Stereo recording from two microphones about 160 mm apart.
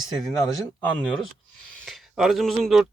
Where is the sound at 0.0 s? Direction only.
Centre (ahead or behind).